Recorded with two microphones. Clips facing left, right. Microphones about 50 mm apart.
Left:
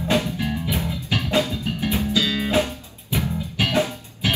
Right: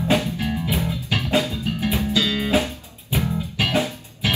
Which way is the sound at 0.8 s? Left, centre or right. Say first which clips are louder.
Even; right.